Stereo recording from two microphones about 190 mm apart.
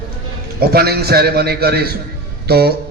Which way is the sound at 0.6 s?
55° right (ahead or behind).